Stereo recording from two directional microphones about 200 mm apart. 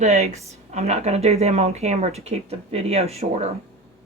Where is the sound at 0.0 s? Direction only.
35° right (ahead or behind).